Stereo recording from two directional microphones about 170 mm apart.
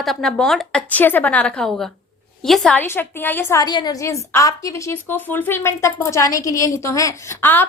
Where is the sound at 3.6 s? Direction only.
25° left (ahead or behind).